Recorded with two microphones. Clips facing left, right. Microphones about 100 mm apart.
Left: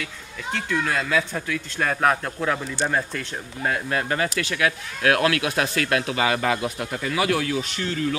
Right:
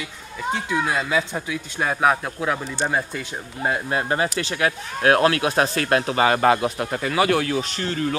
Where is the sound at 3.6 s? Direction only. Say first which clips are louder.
Right 2 dB; 25° right (ahead or behind).